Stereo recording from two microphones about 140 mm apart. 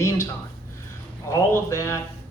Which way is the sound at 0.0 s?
20° left (ahead or behind).